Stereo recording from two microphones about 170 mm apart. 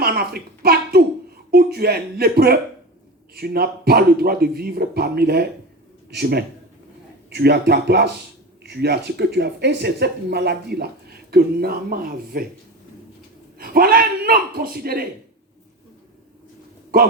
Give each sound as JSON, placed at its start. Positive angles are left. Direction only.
{"t": 0.0, "sound": "a woman's voice", "side_deg": -65}
{"t": 13.6, "sound": "speech", "side_deg": -60}